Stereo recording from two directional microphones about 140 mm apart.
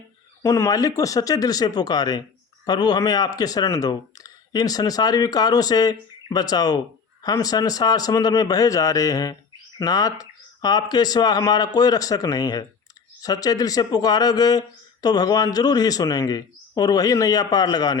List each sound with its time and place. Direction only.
0.4 s speech: 25° left (ahead or behind)